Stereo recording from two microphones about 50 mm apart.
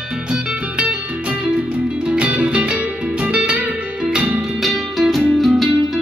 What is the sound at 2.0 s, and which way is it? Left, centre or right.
Music, right.